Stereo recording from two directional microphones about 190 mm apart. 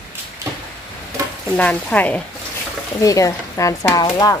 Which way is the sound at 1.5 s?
5° left (ahead or behind).